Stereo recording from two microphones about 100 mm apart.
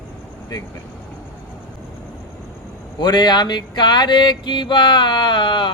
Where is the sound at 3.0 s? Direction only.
45° left (ahead or behind).